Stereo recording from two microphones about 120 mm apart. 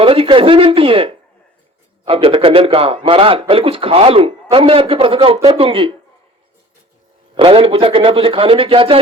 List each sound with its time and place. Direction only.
0.0 s a man's voice: 50° right (ahead or behind)
7.3 s a man's voice: 50° right (ahead or behind)